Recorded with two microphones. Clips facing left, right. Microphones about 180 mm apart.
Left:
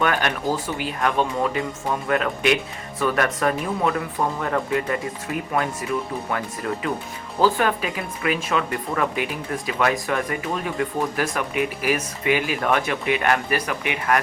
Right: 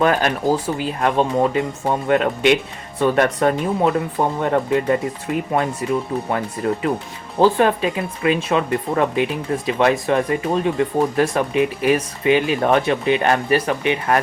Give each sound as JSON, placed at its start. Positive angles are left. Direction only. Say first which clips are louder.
{"t": 0.0, "sound": "speech", "louder": "right 5 dB", "side_deg": -30}